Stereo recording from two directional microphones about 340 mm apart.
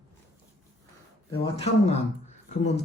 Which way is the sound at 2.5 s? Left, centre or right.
Left.